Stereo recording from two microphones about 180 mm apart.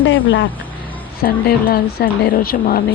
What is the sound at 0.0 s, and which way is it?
Speech, 90° left.